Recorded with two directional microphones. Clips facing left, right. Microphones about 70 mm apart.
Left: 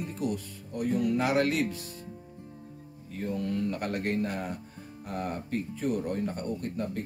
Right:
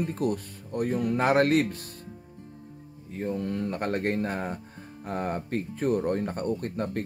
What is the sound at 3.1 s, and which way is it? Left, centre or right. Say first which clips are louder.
Speech: right 2 dB; right.